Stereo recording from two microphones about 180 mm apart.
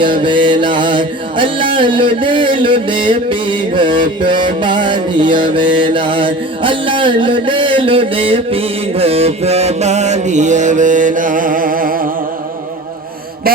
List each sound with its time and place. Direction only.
0.0 s mantra: 25° right (ahead or behind); by 12.0 s 50° right (ahead or behind)